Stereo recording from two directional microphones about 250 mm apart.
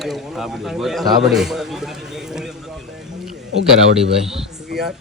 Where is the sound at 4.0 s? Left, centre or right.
Centre.